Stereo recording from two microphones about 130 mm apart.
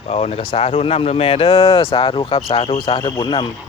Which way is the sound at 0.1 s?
55° left (ahead or behind).